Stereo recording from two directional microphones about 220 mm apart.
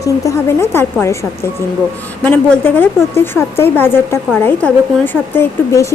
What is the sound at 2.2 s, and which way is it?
A woman's voice, 10° left (ahead or behind).